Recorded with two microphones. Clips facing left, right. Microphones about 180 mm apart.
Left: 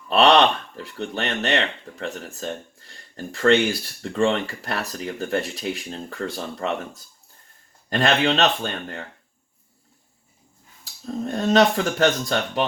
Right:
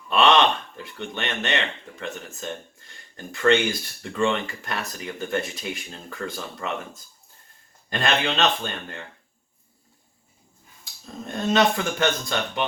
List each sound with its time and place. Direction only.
0.1 s speech: 35° left (ahead or behind)
7.9 s speech: 35° left (ahead or behind)
11.3 s speech: 35° left (ahead or behind)